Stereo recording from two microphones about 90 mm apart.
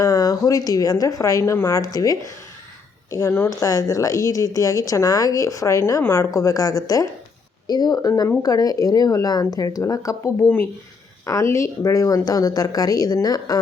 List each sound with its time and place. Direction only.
0.0 s a woman's voice: 40° left (ahead or behind)
3.6 s a woman's voice: 40° left (ahead or behind)